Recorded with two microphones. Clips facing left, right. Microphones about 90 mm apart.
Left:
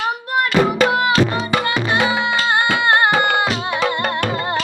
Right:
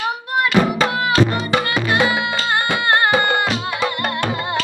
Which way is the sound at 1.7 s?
25° left (ahead or behind).